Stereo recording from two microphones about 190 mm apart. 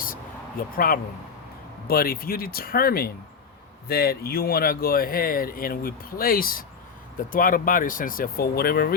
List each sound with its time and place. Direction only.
0.6 s speech: 50° left (ahead or behind)
1.9 s speech: 50° left (ahead or behind)